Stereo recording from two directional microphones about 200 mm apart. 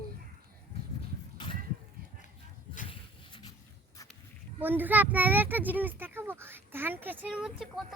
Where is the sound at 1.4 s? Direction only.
20° left (ahead or behind).